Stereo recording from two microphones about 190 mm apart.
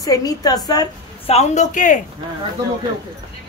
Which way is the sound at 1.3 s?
35° left (ahead or behind).